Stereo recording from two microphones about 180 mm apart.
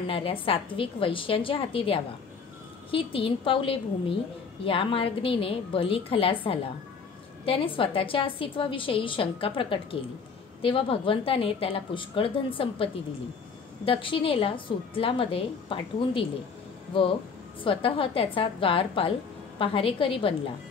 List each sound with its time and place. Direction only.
0.0 s a woman's voice: 30° left (ahead or behind)
17.6 s a woman's voice: 30° left (ahead or behind)